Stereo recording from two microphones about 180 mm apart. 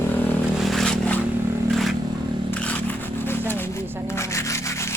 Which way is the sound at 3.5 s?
10° left (ahead or behind).